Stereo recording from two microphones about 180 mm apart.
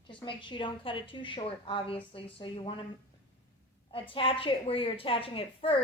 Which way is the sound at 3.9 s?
30° left (ahead or behind).